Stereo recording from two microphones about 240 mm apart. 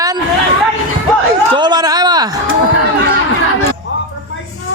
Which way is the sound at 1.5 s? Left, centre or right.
Centre.